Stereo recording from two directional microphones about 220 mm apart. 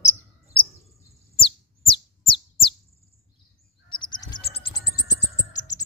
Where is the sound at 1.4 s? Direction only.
25° left (ahead or behind).